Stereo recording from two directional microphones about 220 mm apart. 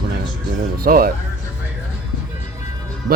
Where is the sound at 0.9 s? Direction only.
40° right (ahead or behind).